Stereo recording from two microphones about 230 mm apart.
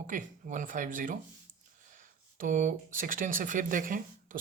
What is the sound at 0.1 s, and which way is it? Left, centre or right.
Speech, right.